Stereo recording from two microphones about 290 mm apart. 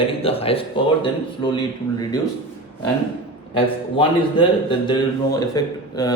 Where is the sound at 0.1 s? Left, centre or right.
Centre.